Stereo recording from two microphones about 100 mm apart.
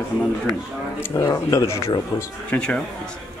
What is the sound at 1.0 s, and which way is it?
Speech, 30° left (ahead or behind).